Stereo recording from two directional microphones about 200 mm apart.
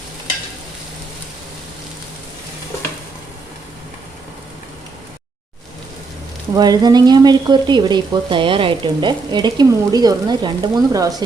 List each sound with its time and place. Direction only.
6.5 s frying: 20° right (ahead or behind)